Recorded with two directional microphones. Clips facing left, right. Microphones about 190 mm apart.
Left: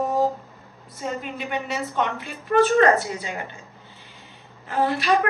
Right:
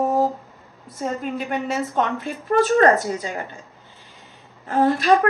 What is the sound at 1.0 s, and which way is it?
A woman's voice, 45° right (ahead or behind).